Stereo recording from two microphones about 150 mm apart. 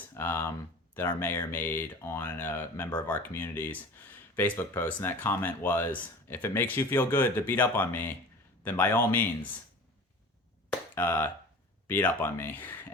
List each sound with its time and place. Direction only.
0.1 s speech: 15° left (ahead or behind)
10.7 s a sound: 15° left (ahead or behind)
11.9 s speech: 15° left (ahead or behind)